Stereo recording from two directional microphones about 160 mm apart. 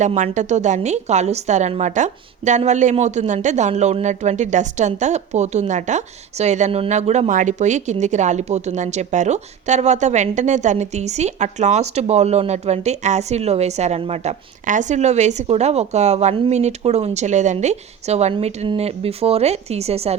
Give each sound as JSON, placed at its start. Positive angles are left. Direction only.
{"t": 0.0, "sound": "speech", "side_deg": -50}